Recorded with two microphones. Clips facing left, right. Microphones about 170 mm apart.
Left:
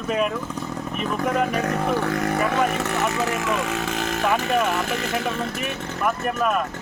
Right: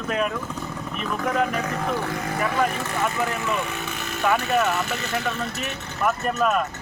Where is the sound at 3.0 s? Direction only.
90° left.